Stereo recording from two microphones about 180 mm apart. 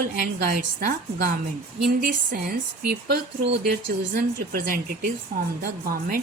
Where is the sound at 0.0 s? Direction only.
50° right (ahead or behind); by 3.6 s 70° right (ahead or behind).